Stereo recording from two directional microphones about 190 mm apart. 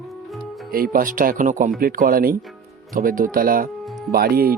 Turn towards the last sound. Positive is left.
turn(degrees=-50)  # may be behind; listen again after turning